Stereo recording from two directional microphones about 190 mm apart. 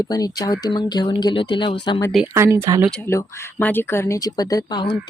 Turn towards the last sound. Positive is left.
turn(degrees=25)  # may be behind; listen again after turning